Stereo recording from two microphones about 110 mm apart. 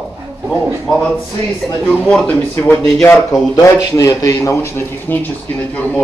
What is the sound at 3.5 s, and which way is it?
A man's voice, 35° left (ahead or behind).